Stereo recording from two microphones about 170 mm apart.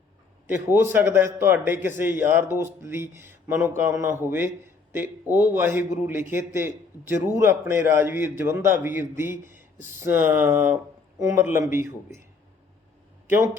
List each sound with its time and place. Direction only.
0.4 s a man's voice: 15° right (ahead or behind)